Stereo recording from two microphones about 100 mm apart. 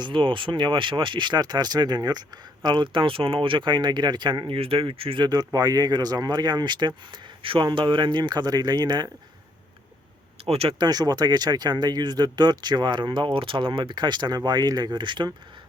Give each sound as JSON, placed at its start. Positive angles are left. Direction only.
{"t": 0.0, "sound": "speech", "side_deg": -55}
{"t": 2.6, "sound": "speech", "side_deg": -55}
{"t": 5.2, "sound": "speech", "side_deg": -40}
{"t": 10.4, "sound": "speech", "side_deg": -85}
{"t": 10.8, "sound": "speech", "side_deg": -45}